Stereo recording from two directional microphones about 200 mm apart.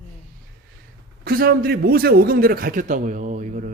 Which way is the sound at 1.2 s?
50° right (ahead or behind).